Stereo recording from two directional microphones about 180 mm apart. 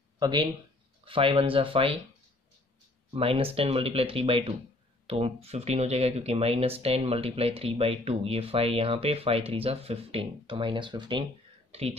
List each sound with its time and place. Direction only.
0.2 s speech: 20° right (ahead or behind)
3.2 s speech: 30° right (ahead or behind)